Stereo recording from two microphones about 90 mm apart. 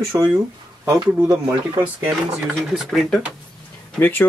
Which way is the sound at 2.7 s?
Centre (ahead or behind).